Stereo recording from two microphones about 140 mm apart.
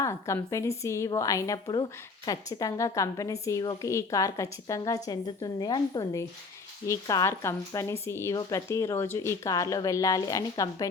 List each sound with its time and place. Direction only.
0.0 s a woman's voice: 20° left (ahead or behind)